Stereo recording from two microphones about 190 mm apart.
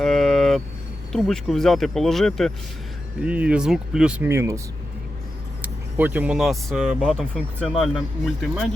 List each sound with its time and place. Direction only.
0.0 s vehicle: centre (ahead or behind)
1.1 s speech: centre (ahead or behind); by 4.6 s 15° right (ahead or behind)
5.6 s speech: 10° right (ahead or behind)